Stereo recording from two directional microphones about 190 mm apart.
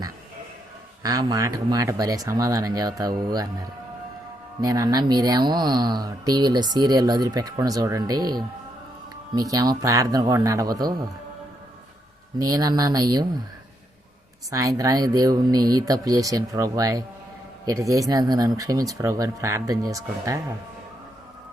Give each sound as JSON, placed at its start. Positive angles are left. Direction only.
{"t": 1.0, "sound": "speech", "side_deg": -20}
{"t": 12.4, "sound": "speech", "side_deg": -20}
{"t": 14.5, "sound": "speech", "side_deg": -15}